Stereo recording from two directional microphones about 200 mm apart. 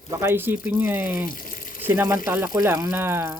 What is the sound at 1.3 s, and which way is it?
Water tap, 45° left (ahead or behind).